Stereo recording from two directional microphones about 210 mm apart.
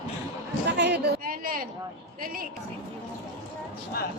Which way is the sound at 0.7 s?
55° right (ahead or behind).